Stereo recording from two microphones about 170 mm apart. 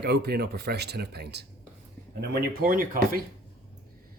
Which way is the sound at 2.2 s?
65° right (ahead or behind).